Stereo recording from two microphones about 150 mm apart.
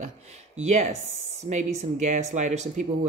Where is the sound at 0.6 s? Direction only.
50° right (ahead or behind).